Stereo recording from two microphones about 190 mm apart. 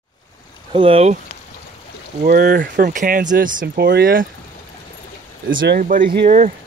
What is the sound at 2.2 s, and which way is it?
Speech, 50° right (ahead or behind).